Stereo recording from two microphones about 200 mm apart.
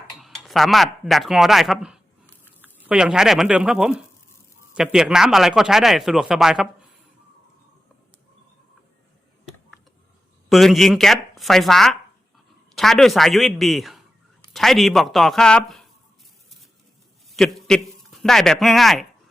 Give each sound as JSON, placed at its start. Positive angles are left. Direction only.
{"t": 0.2, "sound": "speech", "side_deg": 0}
{"t": 10.5, "sound": "speech", "side_deg": 0}
{"t": 17.3, "sound": "a man's voice", "side_deg": 0}